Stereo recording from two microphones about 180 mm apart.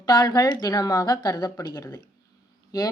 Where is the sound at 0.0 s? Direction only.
20° left (ahead or behind).